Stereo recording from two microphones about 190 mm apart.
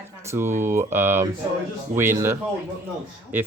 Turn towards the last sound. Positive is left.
turn(degrees=-10)  # may be behind; listen again after turning